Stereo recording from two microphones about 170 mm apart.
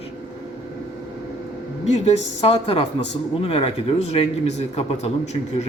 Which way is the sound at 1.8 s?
40° left (ahead or behind).